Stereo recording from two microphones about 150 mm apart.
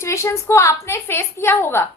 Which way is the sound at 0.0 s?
20° left (ahead or behind).